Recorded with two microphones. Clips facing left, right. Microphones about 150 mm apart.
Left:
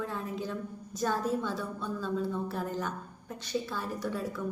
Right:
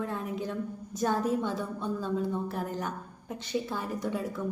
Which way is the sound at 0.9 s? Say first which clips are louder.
Right 2 dB; 20° right (ahead or behind).